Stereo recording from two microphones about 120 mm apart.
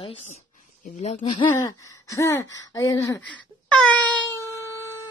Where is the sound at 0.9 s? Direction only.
70° left (ahead or behind).